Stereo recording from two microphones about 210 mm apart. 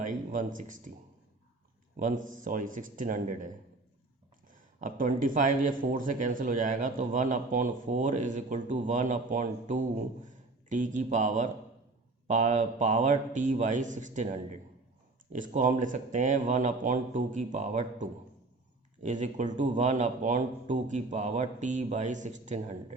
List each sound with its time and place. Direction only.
0.0 s speech: 40° right (ahead or behind)
2.0 s speech: 40° right (ahead or behind)
4.8 s a man's voice: 40° right (ahead or behind)